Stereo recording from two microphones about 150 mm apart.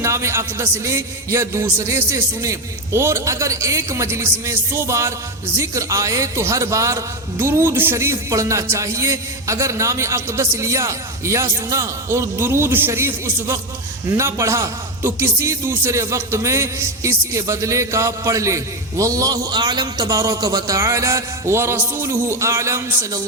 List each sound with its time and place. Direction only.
0.0 s a man's voice: 20° right (ahead or behind)